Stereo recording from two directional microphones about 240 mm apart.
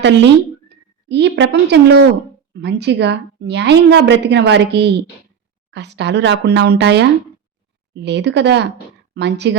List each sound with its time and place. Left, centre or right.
1.0 s a woman's voice: right